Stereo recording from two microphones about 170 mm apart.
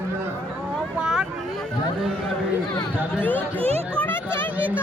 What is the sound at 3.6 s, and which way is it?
Speech, 35° right (ahead or behind).